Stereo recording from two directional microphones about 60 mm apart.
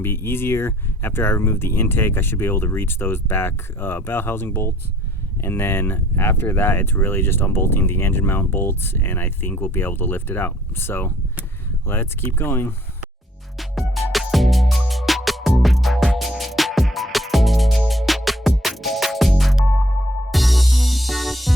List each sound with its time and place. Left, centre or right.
0.0 s speech: left
13.6 s music: centre